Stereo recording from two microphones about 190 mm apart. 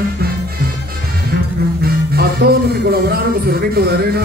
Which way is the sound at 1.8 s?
55° right (ahead or behind).